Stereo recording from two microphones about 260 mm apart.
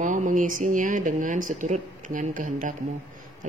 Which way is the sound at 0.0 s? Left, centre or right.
Right.